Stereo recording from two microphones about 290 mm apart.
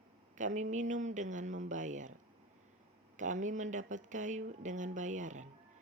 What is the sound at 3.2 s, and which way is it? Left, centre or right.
Speech, right.